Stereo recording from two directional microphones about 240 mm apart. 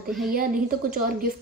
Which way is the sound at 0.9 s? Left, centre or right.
Right.